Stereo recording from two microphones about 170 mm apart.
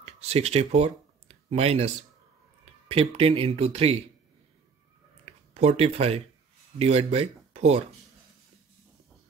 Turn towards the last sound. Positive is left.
turn(degrees=-40)  # may be behind; listen again after turning